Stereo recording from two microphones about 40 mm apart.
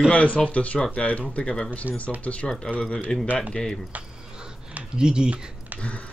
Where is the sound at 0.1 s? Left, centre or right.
Left.